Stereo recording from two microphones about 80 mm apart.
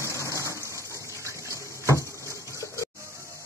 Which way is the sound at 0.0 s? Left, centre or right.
Left.